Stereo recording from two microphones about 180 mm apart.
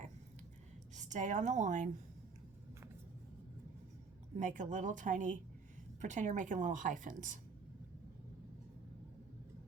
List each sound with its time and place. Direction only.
0.9 s a woman's voice: 40° right (ahead or behind)
4.4 s a woman's voice: 45° right (ahead or behind)